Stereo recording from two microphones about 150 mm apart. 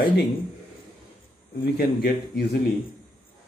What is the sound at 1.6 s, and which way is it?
Speech, 90° left.